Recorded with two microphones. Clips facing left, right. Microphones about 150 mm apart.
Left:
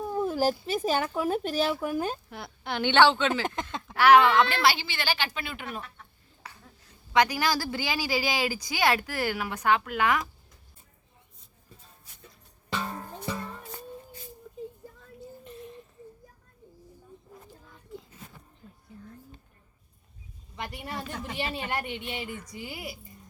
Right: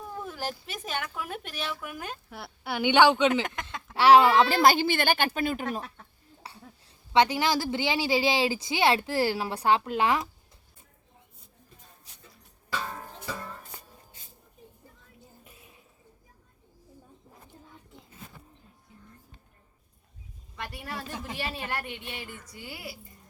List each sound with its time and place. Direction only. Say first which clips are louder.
0.1 s speech: left 10 dB; 35° left (ahead or behind)
2.3 s a woman's voice: even; 5° right (ahead or behind)
3.4 s speech: left 4 dB; 30° left (ahead or behind)
3.9 s a woman's voice: right 1 dB; 30° right (ahead or behind)
15.4 s a sound: left 13 dB; 10° right (ahead or behind)
20.6 s a woman's voice: left 2 dB; 20° left (ahead or behind)